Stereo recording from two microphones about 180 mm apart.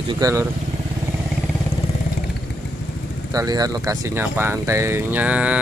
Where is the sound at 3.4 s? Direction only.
20° right (ahead or behind).